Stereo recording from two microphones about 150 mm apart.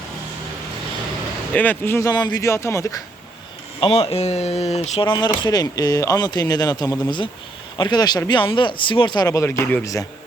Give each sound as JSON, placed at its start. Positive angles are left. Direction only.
{"t": 1.5, "sound": "speech", "side_deg": 10}
{"t": 3.8, "sound": "speech", "side_deg": 40}